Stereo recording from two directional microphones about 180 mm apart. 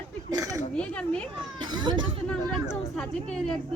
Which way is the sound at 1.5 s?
25° right (ahead or behind).